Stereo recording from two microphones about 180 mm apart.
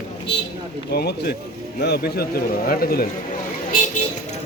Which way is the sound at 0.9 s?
60° left (ahead or behind).